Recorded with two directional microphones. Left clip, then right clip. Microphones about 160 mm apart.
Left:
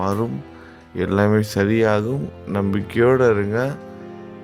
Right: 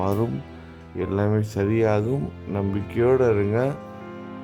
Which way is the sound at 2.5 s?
10° left (ahead or behind).